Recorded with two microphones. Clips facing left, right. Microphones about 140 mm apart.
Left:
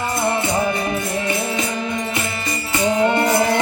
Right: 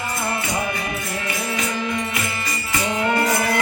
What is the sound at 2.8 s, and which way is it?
Music, 30° left (ahead or behind).